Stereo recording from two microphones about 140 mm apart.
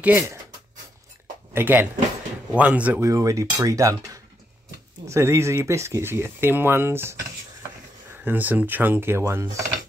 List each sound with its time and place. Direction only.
0.0 s speech: 15° right (ahead or behind)
1.5 s speech: 15° right (ahead or behind)
3.1 s speech: 25° right (ahead or behind)
8.2 s speech: 15° right (ahead or behind)